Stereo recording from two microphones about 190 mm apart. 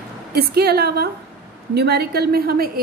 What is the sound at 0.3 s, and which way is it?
A woman's voice, 55° right (ahead or behind).